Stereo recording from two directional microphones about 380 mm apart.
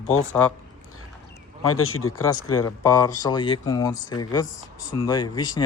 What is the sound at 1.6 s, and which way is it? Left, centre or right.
Speech, left.